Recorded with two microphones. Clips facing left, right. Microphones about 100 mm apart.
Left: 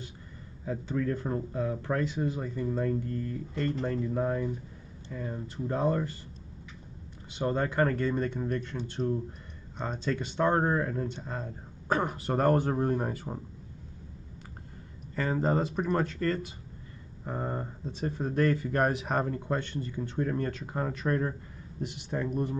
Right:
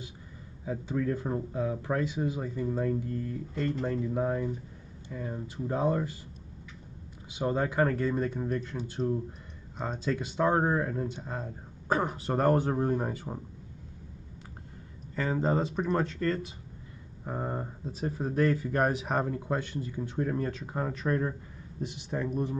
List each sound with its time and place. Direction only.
0.7 s speech: 10° right (ahead or behind)
7.2 s speech: 5° right (ahead or behind)
15.1 s speech: centre (ahead or behind)